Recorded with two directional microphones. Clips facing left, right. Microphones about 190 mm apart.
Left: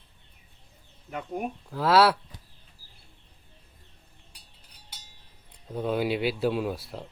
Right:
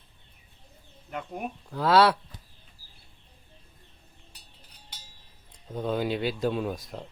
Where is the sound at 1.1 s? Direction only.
Centre (ahead or behind).